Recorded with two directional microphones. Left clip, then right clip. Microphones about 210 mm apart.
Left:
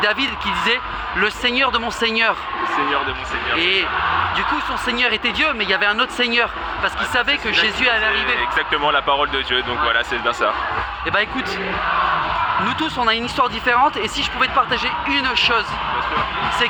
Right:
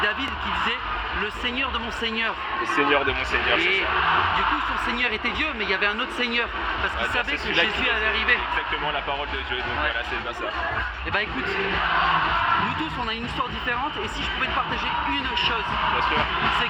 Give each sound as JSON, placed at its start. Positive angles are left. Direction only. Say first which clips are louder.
{"t": 0.0, "sound": "speech", "louder": "left 6 dB", "side_deg": 50}
{"t": 4.9, "sound": "speech", "louder": "left 6 dB", "side_deg": 45}
{"t": 12.8, "sound": "speech", "louder": "left 9 dB", "side_deg": 50}
{"t": 15.2, "sound": "speech", "louder": "left 7 dB", "side_deg": 50}